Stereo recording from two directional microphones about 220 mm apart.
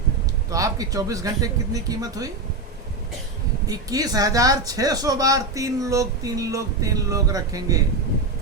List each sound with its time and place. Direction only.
0.5 s speech: 15° right (ahead or behind)
3.7 s speech: 15° right (ahead or behind)